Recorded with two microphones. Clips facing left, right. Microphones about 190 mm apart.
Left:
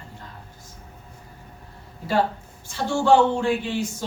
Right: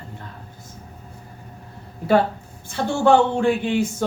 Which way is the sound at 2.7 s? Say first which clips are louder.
Right 2 dB; 55° right (ahead or behind).